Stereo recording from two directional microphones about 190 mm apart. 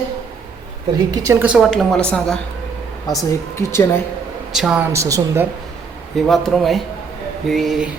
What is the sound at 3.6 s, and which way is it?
Speech, 15° left (ahead or behind).